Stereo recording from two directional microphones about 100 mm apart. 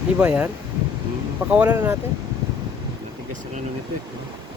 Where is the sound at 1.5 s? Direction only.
15° right (ahead or behind).